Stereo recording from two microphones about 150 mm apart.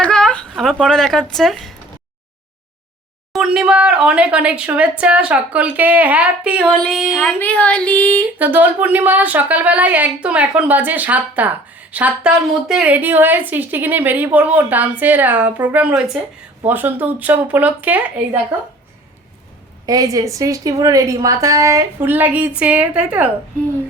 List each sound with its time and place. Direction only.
0.0 s speech: 5° left (ahead or behind)
3.3 s a woman's voice: 5° right (ahead or behind)
7.3 s a sound: 10° left (ahead or behind)
8.4 s a woman's voice: 10° right (ahead or behind)
19.8 s a woman's voice: 25° right (ahead or behind); by 23.3 s 10° right (ahead or behind)